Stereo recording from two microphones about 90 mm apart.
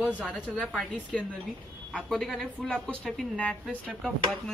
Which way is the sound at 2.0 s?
5° left (ahead or behind).